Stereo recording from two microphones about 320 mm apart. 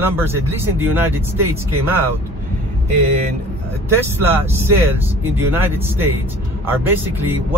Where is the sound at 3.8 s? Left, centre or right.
Centre.